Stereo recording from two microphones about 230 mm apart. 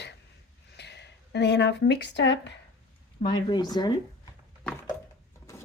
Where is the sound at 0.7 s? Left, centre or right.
Left.